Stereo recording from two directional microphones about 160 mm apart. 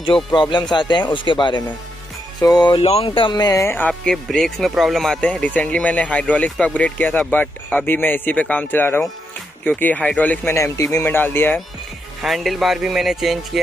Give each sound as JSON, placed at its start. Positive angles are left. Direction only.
{"t": 0.4, "sound": "speech", "side_deg": 30}
{"t": 2.8, "sound": "speech", "side_deg": 40}
{"t": 12.2, "sound": "speech", "side_deg": 0}